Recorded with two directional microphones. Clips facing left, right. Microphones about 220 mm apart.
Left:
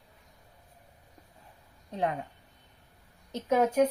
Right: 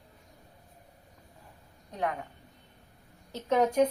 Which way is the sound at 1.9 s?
30° left (ahead or behind).